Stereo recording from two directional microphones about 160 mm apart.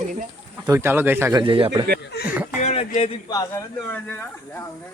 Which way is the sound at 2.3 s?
10° right (ahead or behind).